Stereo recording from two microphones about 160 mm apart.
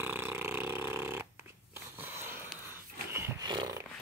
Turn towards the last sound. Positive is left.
turn(degrees=-25)  # may be behind; listen again after turning